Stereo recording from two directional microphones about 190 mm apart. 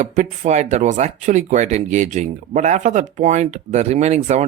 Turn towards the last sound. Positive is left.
turn(degrees=-35)  # may be behind; listen again after turning